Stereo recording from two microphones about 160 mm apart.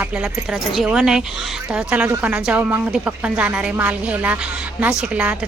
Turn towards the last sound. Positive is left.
turn(degrees=-5)  # may be behind; listen again after turning